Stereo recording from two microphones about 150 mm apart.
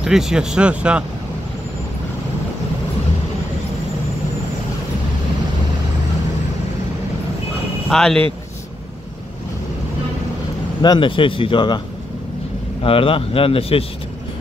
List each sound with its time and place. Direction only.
0.0 s speech: 5° right (ahead or behind)
7.9 s speech: 5° left (ahead or behind)
10.8 s speech: 30° left (ahead or behind)
12.8 s speech: 35° left (ahead or behind)